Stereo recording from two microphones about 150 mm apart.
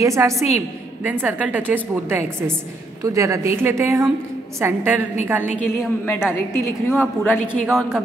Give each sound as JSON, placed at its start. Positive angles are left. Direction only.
{"t": 0.0, "sound": "a woman's voice", "side_deg": -20}
{"t": 5.6, "sound": "a woman's voice", "side_deg": 15}
{"t": 7.6, "sound": "a woman's voice", "side_deg": -5}